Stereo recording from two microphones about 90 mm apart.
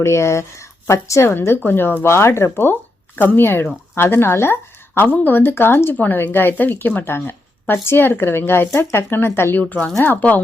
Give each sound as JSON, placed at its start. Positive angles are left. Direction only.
{"t": 0.0, "sound": "a woman's voice", "side_deg": 30}